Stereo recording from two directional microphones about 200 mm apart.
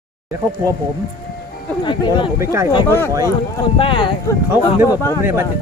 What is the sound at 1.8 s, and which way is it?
Speech, 25° left (ahead or behind).